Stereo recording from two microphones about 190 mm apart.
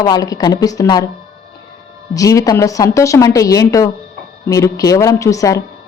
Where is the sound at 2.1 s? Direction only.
20° left (ahead or behind).